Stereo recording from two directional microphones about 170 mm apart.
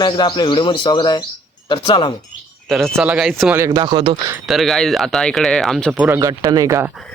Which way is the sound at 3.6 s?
25° right (ahead or behind).